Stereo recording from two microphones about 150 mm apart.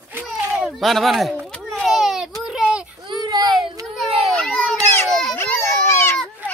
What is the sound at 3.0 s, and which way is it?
Baby cry, 30° right (ahead or behind).